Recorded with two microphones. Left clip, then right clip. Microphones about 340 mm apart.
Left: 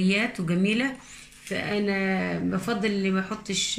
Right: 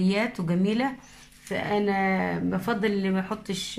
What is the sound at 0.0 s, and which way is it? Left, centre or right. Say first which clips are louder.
A woman's voice: left 1 dB; centre.